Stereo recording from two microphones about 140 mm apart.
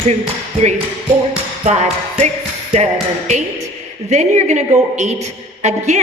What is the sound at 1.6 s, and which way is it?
Music, 55° right (ahead or behind).